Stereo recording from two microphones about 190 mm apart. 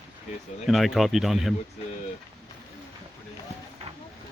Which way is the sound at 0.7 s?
Centre (ahead or behind).